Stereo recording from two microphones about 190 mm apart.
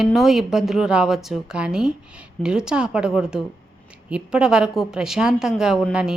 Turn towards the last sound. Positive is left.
turn(degrees=-5)  # may be behind; listen again after turning